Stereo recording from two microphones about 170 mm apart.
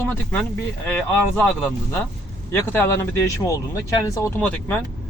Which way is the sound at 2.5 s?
15° left (ahead or behind).